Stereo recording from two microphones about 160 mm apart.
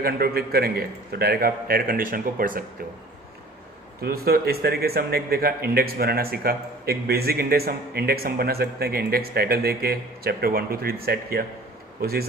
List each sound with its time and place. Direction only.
0.0 s speech: 75° right (ahead or behind)
4.0 s speech: 70° right (ahead or behind)